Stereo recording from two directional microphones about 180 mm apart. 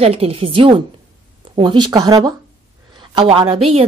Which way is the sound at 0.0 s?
35° right (ahead or behind).